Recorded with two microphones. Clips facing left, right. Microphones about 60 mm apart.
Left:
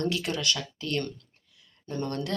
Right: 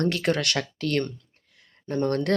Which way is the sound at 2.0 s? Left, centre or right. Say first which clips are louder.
Right 8 dB; right.